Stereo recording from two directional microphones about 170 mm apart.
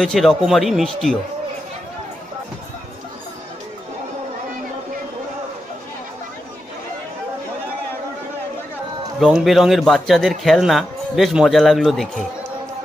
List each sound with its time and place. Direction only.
0.0 s speech: centre (ahead or behind)
9.2 s speech: centre (ahead or behind)